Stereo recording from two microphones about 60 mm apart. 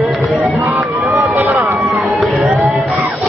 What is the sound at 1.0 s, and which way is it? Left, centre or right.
Run, right.